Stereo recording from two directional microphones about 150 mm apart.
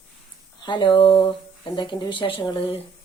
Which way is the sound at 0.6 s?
30° left (ahead or behind).